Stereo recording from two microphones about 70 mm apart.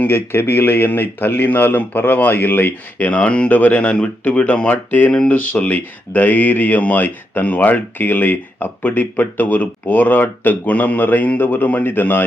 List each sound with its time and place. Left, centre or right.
0.0 s speech: left